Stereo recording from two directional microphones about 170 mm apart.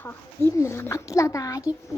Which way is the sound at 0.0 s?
15° left (ahead or behind).